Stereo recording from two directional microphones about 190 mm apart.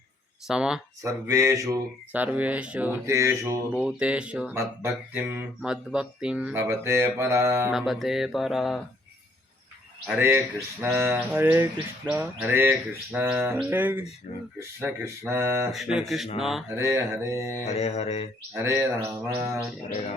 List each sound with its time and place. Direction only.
0.4 s speech: 5° right (ahead or behind)
1.0 s speech: 15° right (ahead or behind)
3.8 s speech: 5° right (ahead or behind)
7.7 s speech: centre (ahead or behind)
10.1 s speech: 10° right (ahead or behind)
14.3 s speech: 30° left (ahead or behind)
15.0 s speech: 15° right (ahead or behind)
16.0 s speech: centre (ahead or behind)
16.6 s speech: 15° right (ahead or behind)
17.7 s mantra: 35° left (ahead or behind)
18.5 s speech: 15° right (ahead or behind)